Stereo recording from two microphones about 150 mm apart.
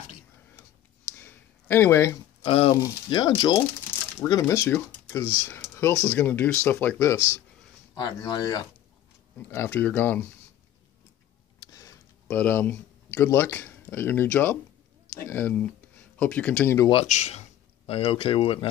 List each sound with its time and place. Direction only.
1.1 s a sound: 15° left (ahead or behind)
2.4 s speech: 40° left (ahead or behind)
2.7 s speech: 25° left (ahead or behind)
7.2 s speech: 15° right (ahead or behind)
7.9 s speech: 30° left (ahead or behind)
9.5 s speech: 15° left (ahead or behind)
11.6 s a sound: 25° left (ahead or behind)
12.3 s speech: 10° left (ahead or behind)
16.9 s speech: 50° left (ahead or behind)